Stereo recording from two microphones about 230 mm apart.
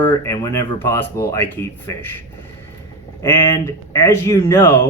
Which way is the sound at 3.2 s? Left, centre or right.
Centre.